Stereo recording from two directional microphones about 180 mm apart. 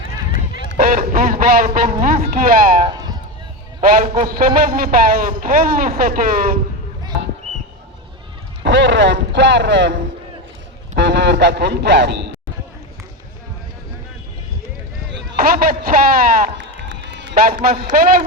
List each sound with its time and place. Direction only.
0.8 s a sound: 55° right (ahead or behind)
2.0 s a man's voice: 45° right (ahead or behind)
8.6 s speech: 80° right
15.4 s a man's voice: 55° right (ahead or behind)
16.6 s run: 90° right
17.9 s a man's voice: 50° right (ahead or behind)